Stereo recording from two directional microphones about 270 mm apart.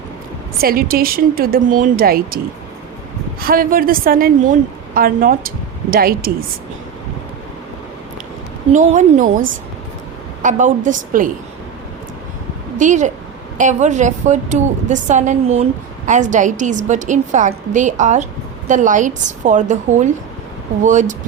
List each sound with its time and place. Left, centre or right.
0.6 s speech: right
3.4 s speech: right
8.7 s a woman's voice: right
10.4 s a woman's voice: right
12.7 s a woman's voice: right